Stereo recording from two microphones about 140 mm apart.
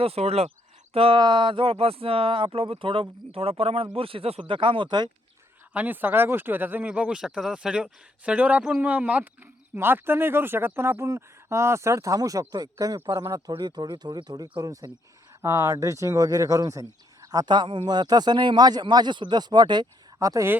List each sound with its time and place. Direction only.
0.0 s speech: 45° right (ahead or behind)
5.7 s speech: 10° right (ahead or behind)